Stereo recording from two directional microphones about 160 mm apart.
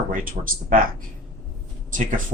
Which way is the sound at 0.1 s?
60° right (ahead or behind).